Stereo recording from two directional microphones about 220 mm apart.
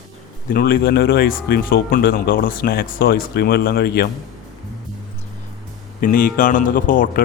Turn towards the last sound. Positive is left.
turn(degrees=40)  # may be behind; listen again after turning